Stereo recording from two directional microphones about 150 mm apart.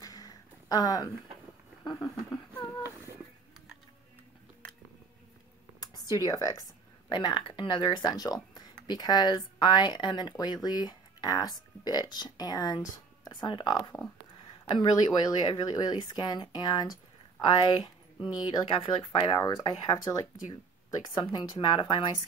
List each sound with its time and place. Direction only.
0.0 s a sound: 25° left (ahead or behind)
5.8 s speech: 25° left (ahead or behind)
7.1 s speech: 35° left (ahead or behind)